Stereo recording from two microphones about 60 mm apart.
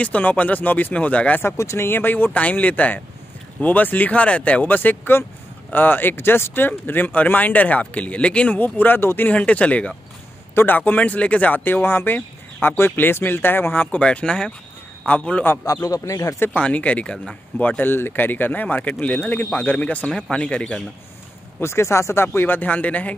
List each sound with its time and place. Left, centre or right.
0.0 s speech: left
1.4 s speech: left
1.9 s speech: left; by 8.5 s centre
8.5 s speech: left
9.3 s speech: left
10.5 s speech: left
10.9 s speech: left
13.9 s speech: centre
15.6 s speech: left
16.5 s speech: centre
17.6 s speech: left
20.1 s speech: centre
21.5 s speech: left